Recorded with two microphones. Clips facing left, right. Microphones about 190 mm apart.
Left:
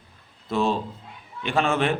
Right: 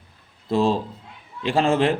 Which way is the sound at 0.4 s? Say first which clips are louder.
Right 3 dB; 30° right (ahead or behind).